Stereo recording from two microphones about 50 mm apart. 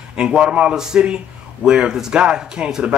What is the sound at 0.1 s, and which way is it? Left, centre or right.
Speech, centre.